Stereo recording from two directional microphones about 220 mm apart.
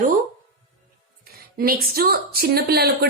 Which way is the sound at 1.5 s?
40° right (ahead or behind).